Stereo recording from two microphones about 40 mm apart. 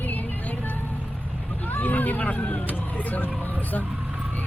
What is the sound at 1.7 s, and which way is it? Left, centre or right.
Speech, left.